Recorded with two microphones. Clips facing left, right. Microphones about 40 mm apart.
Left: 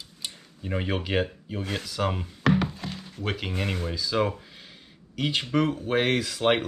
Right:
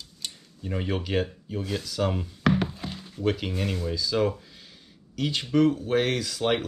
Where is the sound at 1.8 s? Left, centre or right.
Centre.